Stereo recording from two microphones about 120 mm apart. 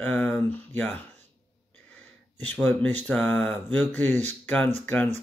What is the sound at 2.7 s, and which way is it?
Speech, 15° left (ahead or behind).